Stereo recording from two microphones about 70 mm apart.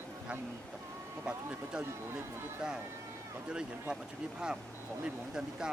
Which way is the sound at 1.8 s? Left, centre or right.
Right.